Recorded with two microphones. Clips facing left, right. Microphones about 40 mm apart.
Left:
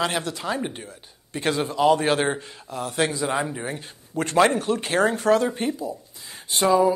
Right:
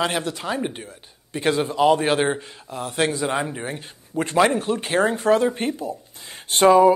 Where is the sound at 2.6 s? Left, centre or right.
Right.